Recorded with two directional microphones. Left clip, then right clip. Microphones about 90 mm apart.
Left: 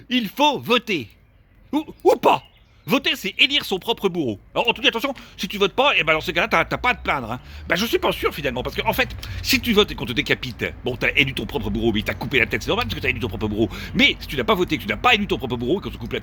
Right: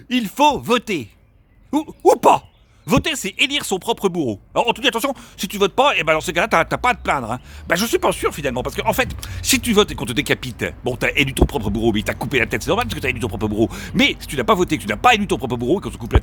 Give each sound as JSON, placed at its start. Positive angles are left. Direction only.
{"t": 0.1, "sound": "speech", "side_deg": -35}